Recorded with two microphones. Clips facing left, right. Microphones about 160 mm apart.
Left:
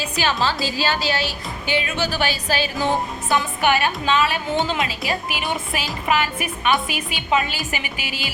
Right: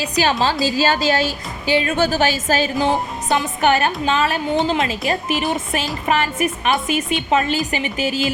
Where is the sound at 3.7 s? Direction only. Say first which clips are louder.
Right 2 dB; 45° right (ahead or behind).